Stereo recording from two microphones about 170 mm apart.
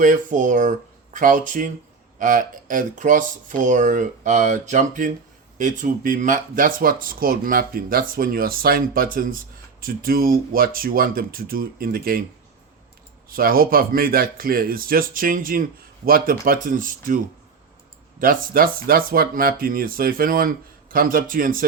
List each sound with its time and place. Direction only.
0.0 s speech: 50° right (ahead or behind)
13.3 s speech: 60° right (ahead or behind)
18.2 s speech: 55° right (ahead or behind)